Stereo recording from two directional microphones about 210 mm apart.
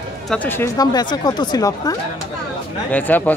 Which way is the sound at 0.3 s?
10° left (ahead or behind).